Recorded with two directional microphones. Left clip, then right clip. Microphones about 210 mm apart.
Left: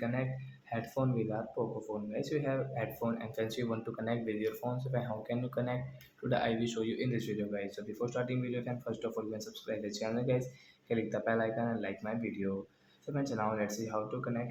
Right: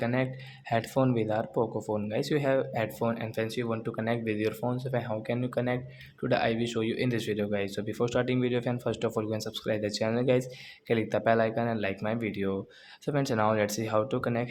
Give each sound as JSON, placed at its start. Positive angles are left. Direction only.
{"t": 0.0, "sound": "speech", "side_deg": -40}